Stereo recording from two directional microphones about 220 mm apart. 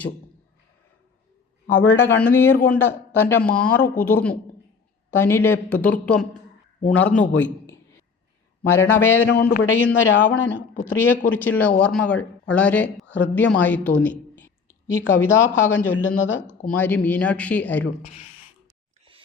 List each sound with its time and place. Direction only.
1.7 s speech: 10° left (ahead or behind)
9.2 s a man's voice: 45° left (ahead or behind)
9.6 s a woman's voice: 10° left (ahead or behind)